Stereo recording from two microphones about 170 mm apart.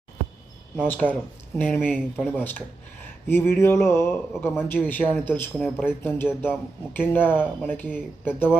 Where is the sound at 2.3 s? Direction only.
10° left (ahead or behind).